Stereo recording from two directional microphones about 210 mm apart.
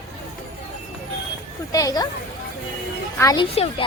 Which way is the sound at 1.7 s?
15° left (ahead or behind).